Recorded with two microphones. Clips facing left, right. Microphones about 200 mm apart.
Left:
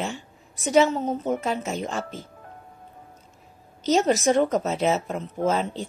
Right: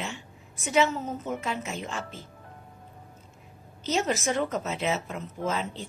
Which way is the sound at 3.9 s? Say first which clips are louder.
Left 7 dB; 35° left (ahead or behind).